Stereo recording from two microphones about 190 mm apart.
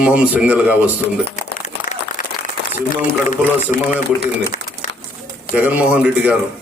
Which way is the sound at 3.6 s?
40° left (ahead or behind).